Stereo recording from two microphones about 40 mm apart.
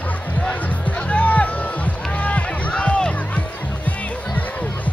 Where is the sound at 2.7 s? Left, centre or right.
Left.